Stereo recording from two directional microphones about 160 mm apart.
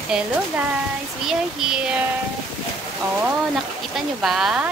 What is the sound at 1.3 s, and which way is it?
Speech, 5° right (ahead or behind).